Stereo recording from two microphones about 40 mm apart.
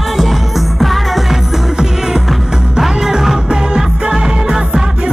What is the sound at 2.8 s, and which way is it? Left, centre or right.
Music, centre.